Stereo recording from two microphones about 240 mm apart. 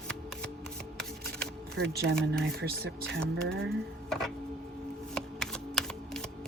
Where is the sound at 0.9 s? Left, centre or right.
Centre.